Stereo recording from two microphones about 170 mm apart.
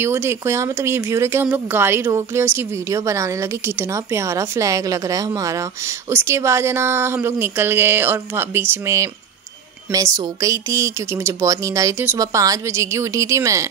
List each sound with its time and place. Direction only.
0.0 s speech: 15° right (ahead or behind)